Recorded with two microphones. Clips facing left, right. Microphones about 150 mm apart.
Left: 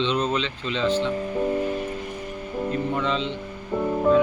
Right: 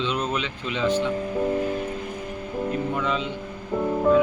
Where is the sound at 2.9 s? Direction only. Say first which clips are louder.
Left 1 dB; 5° right (ahead or behind).